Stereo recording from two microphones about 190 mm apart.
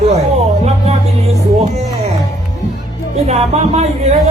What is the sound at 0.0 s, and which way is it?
Music, 35° right (ahead or behind).